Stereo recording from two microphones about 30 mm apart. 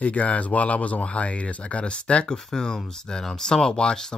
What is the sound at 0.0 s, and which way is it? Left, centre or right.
Speech, left.